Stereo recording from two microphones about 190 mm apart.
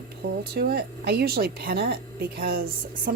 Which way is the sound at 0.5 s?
55° right (ahead or behind).